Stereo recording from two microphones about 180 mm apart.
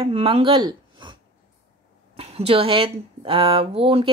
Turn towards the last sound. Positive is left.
turn(degrees=-30)  # may be behind; listen again after turning